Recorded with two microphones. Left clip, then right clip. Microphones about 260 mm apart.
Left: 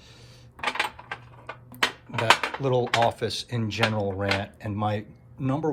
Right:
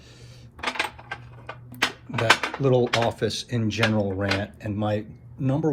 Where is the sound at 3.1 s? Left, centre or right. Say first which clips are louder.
Right 3 dB; centre.